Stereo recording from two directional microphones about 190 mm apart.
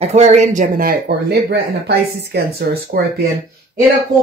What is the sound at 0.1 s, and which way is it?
Speech, 35° right (ahead or behind).